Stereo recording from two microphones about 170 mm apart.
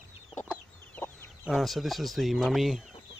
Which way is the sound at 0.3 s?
10° left (ahead or behind).